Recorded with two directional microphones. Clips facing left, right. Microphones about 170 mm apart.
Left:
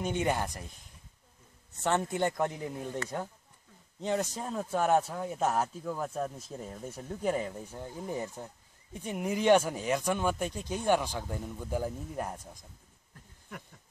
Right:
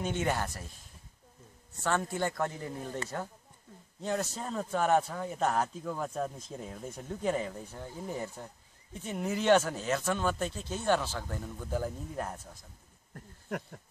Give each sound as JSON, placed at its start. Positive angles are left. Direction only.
{"t": 0.0, "sound": "speech", "side_deg": 15}
{"t": 1.8, "sound": "a man's voice", "side_deg": 20}
{"t": 4.0, "sound": "speech", "side_deg": 15}
{"t": 13.1, "sound": "a sound", "side_deg": -55}